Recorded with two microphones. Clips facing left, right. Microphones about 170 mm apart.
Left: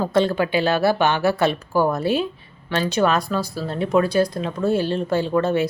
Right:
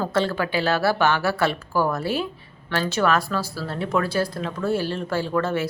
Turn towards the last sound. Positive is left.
turn(degrees=20)  # may be behind; listen again after turning